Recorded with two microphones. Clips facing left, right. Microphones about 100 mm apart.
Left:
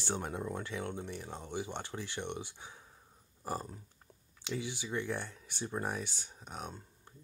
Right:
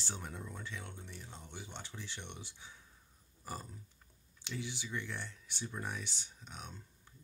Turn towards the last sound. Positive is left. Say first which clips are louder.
# left 6 dB
turn(degrees=45)  # may be behind; listen again after turning